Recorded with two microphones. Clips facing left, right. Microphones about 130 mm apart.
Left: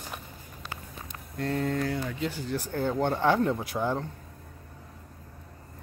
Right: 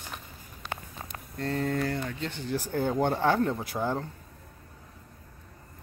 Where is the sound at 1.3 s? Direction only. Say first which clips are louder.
Left 1 dB; 5° left (ahead or behind).